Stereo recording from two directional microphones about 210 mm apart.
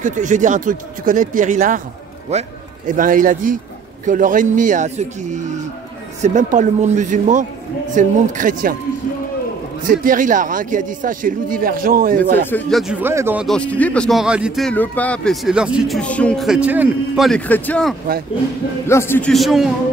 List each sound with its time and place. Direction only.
0.0 s a man's voice: 35° right (ahead or behind)
9.8 s a man's voice: 40° right (ahead or behind)
12.4 s speech: 5° left (ahead or behind); by 13.5 s 10° right (ahead or behind)
13.5 s speech: 5° left (ahead or behind)